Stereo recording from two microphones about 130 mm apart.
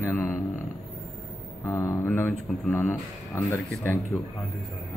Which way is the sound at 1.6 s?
15° left (ahead or behind).